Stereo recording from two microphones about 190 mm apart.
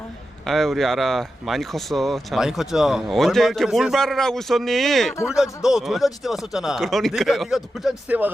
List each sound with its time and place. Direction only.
0.4 s speech: centre (ahead or behind)